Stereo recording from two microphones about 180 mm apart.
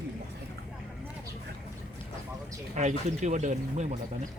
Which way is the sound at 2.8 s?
40° right (ahead or behind).